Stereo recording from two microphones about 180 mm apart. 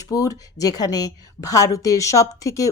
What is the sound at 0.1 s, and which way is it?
A woman's voice, 20° left (ahead or behind).